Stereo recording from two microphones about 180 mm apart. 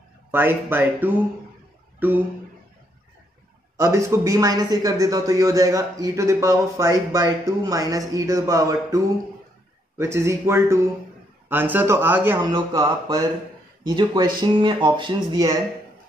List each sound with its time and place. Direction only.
0.3 s speech: 10° right (ahead or behind)
3.7 s a man's voice: 15° right (ahead or behind)